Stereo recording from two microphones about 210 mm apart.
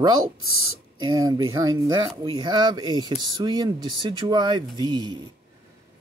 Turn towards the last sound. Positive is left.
turn(degrees=-20)  # may be behind; listen again after turning